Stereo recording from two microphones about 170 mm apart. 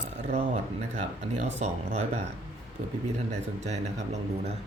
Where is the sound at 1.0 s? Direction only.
45° right (ahead or behind).